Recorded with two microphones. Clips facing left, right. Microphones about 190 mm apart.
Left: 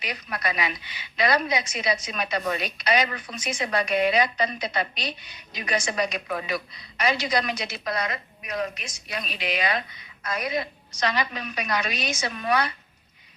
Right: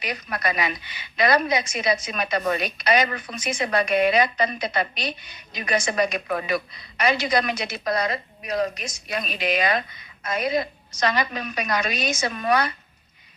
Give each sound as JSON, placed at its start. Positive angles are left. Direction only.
{"t": 0.0, "sound": "a woman's voice", "side_deg": -50}
{"t": 7.9, "sound": "a woman's voice", "side_deg": -35}
{"t": 10.2, "sound": "a woman's voice", "side_deg": -25}
{"t": 10.5, "sound": "a woman's voice", "side_deg": -45}